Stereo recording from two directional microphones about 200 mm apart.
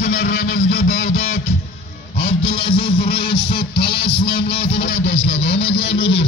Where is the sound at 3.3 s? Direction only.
60° left (ahead or behind).